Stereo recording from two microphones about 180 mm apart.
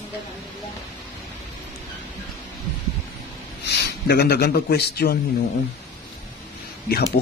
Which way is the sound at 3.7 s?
65° left (ahead or behind).